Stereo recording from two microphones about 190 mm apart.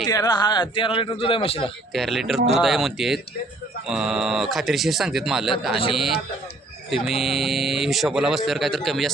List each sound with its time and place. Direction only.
0.0 s a man's voice: 20° left (ahead or behind)
1.9 s speech: centre (ahead or behind)